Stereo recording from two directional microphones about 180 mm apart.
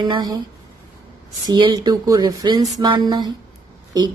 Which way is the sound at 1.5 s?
25° right (ahead or behind).